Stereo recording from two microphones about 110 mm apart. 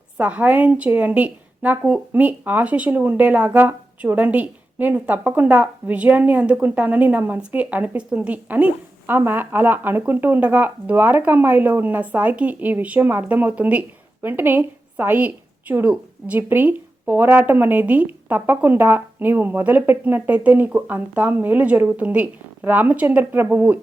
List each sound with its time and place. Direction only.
0.2 s a woman's voice: 10° right (ahead or behind)